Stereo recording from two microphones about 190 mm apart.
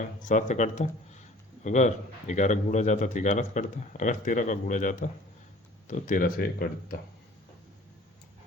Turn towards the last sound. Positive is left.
turn(degrees=50)  # may be behind; listen again after turning